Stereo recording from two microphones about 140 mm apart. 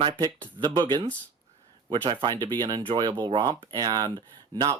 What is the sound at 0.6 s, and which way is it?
Speech, 30° right (ahead or behind).